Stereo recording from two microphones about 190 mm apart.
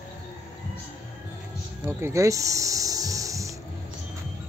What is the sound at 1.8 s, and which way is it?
Snake, 15° right (ahead or behind).